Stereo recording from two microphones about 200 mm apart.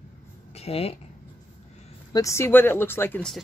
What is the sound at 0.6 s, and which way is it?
Speech, 30° left (ahead or behind).